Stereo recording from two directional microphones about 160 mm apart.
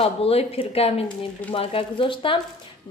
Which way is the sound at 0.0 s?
40° left (ahead or behind).